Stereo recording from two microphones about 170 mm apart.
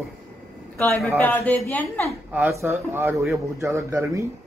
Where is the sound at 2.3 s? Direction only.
15° right (ahead or behind).